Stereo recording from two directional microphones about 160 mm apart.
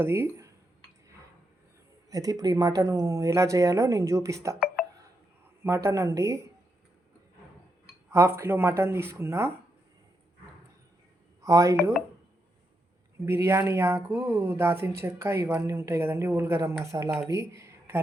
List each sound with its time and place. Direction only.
0.0 s speech: 15° right (ahead or behind)
2.0 s speech: 20° right (ahead or behind)
5.6 s speech: 15° right (ahead or behind)
8.1 s speech: 15° right (ahead or behind)
11.4 s speech: 20° right (ahead or behind)
13.2 s speech: 15° right (ahead or behind)